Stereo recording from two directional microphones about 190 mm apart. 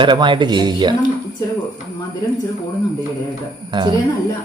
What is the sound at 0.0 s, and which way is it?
Speech, 25° right (ahead or behind).